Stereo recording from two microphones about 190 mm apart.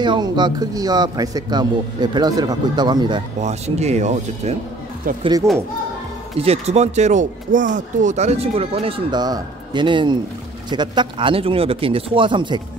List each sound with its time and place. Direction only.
0.0 s speech: 20° right (ahead or behind)
3.3 s speech: 35° right (ahead or behind)
5.2 s speech: 20° right (ahead or behind)
6.4 s speech: 35° right (ahead or behind)